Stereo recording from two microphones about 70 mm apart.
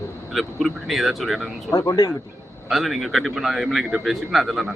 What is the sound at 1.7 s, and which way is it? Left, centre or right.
Speech, left.